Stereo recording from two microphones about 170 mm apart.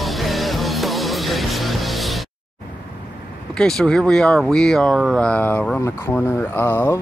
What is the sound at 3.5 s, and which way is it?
Speech, 5° left (ahead or behind).